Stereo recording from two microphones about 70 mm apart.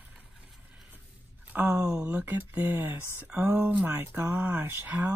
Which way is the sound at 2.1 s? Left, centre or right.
Right.